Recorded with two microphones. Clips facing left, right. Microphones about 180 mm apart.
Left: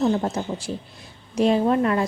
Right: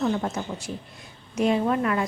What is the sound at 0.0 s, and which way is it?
A woman's voice, 30° left (ahead or behind).